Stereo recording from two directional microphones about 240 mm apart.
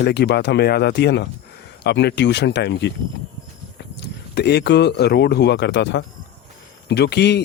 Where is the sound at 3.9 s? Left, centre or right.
Left.